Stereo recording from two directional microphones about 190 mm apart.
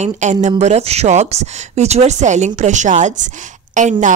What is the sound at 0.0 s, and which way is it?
A woman's voice, 40° right (ahead or behind).